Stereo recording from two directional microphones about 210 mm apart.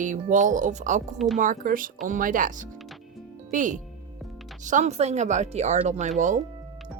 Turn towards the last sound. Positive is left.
turn(degrees=-35)  # may be behind; listen again after turning